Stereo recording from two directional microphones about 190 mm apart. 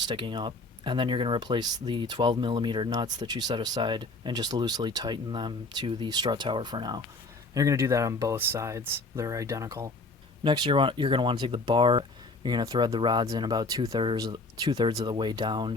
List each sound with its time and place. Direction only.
0.0 s speech: 25° right (ahead or behind)